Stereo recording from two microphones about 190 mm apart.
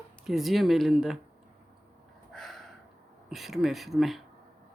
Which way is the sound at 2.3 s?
Centre (ahead or behind).